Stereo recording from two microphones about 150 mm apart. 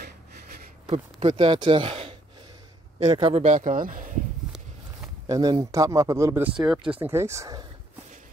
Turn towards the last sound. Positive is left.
turn(degrees=-20)  # may be behind; listen again after turning